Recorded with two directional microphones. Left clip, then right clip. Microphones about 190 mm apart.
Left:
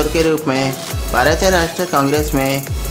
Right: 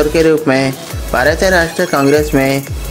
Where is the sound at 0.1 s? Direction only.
20° right (ahead or behind).